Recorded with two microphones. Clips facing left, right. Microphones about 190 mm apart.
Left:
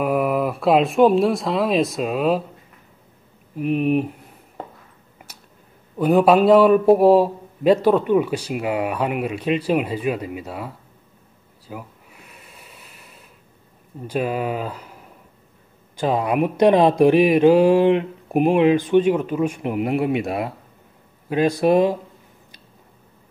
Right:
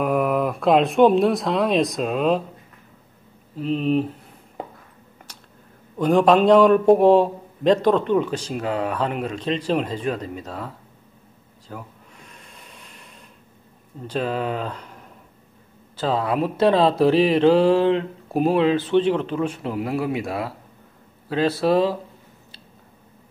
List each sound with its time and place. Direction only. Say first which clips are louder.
0.0 s speech: left 1 dB; centre (ahead or behind)
3.5 s a man's voice: left 2 dB; 15° left (ahead or behind)
5.3 s a sound: even; 10° left (ahead or behind)
5.9 s a man's voice: left 1 dB; 10° left (ahead or behind)
11.6 s a sound: left 2 dB; 10° left (ahead or behind)
14.0 s a man's voice: left 2 dB; 10° left (ahead or behind)